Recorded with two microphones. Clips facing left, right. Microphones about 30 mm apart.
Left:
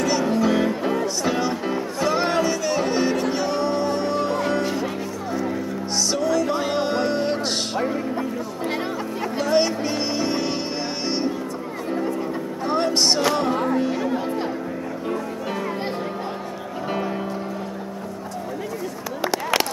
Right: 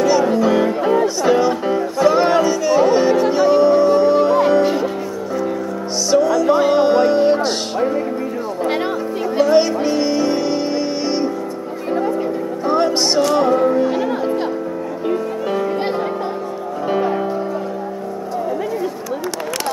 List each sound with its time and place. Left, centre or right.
0.0 s music: centre
6.0 s music: centre
9.5 s music: centre
12.6 s music: centre
13.8 s music: right